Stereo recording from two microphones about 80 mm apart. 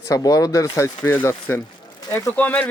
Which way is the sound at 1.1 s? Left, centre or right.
Left.